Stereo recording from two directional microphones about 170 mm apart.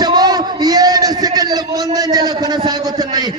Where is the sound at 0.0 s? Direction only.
25° right (ahead or behind).